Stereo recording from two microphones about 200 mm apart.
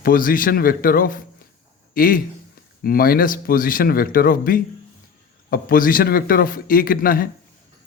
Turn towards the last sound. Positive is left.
turn(degrees=45)  # may be behind; listen again after turning